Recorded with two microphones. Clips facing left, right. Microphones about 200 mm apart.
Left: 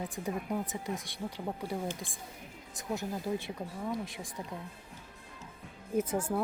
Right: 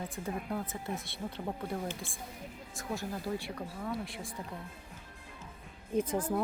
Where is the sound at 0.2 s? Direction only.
15° left (ahead or behind).